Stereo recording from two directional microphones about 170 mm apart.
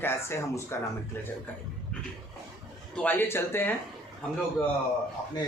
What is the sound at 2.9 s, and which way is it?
Speech, 10° left (ahead or behind).